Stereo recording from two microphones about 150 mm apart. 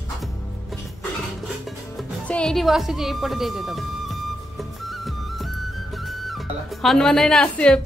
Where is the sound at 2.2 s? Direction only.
5° left (ahead or behind).